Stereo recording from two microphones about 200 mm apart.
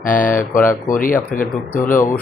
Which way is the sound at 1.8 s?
40° left (ahead or behind).